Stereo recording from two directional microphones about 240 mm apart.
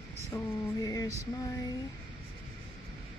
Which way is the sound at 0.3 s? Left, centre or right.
Centre.